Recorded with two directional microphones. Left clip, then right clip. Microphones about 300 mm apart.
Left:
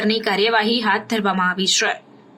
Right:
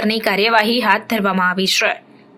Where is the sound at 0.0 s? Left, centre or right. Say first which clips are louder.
Right 2 dB; centre.